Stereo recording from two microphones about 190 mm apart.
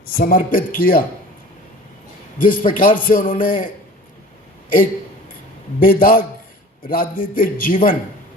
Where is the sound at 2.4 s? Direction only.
45° left (ahead or behind).